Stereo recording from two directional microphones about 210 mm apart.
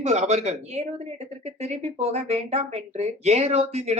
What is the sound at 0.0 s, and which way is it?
Speech, 30° right (ahead or behind).